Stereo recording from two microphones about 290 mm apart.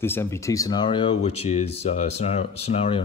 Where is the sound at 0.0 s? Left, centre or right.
Centre.